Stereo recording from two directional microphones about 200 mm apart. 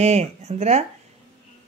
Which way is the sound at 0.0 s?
30° right (ahead or behind).